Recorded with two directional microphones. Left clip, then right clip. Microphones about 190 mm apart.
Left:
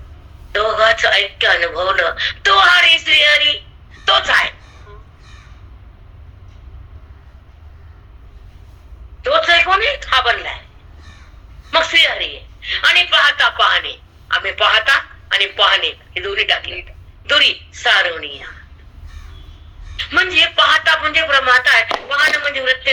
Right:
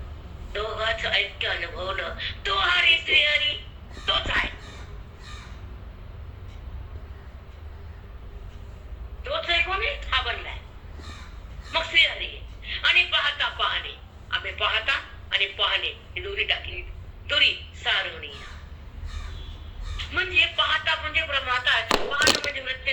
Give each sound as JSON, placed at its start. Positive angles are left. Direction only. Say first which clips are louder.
{"t": 0.5, "sound": "a man's voice", "louder": "left 14 dB", "side_deg": 55}
{"t": 9.2, "sound": "a woman's voice", "louder": "left 12 dB", "side_deg": 50}
{"t": 11.7, "sound": "a man's voice", "louder": "left 9 dB", "side_deg": 55}
{"t": 20.0, "sound": "a man's voice", "louder": "left 9 dB", "side_deg": 55}